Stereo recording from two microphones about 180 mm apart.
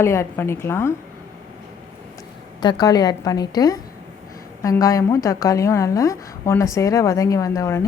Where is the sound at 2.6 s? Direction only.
25° left (ahead or behind).